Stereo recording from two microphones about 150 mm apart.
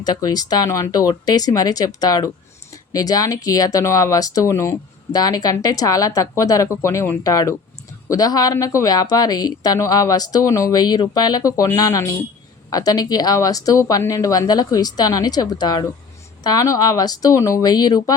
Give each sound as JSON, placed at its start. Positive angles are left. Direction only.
{"t": 0.0, "sound": "a woman's voice", "side_deg": 25}